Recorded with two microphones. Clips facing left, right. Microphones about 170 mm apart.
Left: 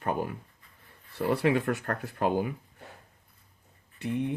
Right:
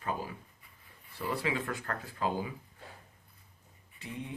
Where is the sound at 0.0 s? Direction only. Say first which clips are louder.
Left 6 dB; 60° left (ahead or behind).